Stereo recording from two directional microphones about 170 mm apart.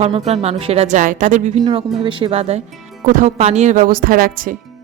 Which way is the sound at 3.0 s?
45° right (ahead or behind).